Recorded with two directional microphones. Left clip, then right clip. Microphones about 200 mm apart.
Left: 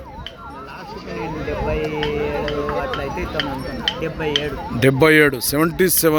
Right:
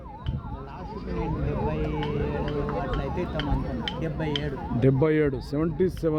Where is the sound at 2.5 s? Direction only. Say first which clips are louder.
Left 7 dB; 45° right (ahead or behind).